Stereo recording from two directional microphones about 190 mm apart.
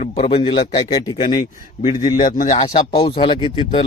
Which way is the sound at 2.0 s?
40° left (ahead or behind).